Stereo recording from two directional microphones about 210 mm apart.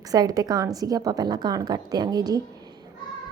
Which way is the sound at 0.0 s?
15° right (ahead or behind).